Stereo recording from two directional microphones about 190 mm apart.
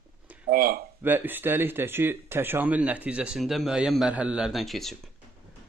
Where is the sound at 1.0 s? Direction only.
10° right (ahead or behind).